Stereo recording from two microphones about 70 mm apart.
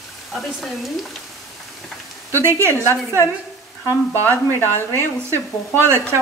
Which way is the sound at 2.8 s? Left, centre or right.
Left.